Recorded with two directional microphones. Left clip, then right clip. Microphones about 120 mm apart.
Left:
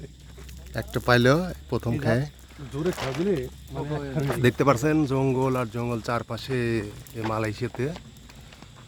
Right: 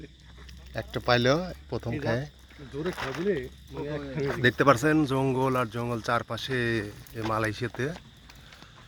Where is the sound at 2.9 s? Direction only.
35° right (ahead or behind).